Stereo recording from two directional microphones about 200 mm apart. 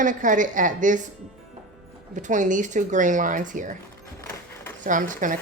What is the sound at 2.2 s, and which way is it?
Speech, 40° right (ahead or behind).